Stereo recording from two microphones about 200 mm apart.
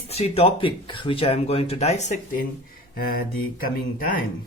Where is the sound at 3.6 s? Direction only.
45° left (ahead or behind).